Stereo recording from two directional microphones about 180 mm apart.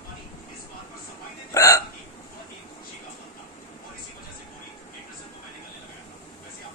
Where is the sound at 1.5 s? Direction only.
20° left (ahead or behind).